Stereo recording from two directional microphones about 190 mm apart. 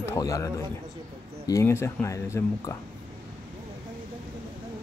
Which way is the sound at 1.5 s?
15° left (ahead or behind).